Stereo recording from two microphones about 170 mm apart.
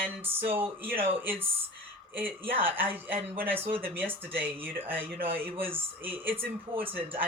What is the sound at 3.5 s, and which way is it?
Speech, 35° right (ahead or behind).